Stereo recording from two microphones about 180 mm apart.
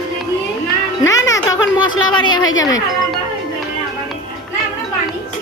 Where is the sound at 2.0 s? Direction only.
25° left (ahead or behind).